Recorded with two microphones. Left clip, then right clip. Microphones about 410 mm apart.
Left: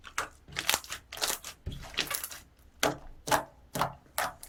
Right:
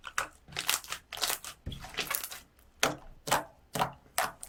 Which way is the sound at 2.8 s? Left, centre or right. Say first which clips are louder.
Left 1 dB; centre.